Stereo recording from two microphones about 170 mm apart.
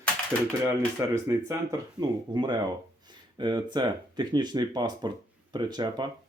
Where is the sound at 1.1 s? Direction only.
15° right (ahead or behind).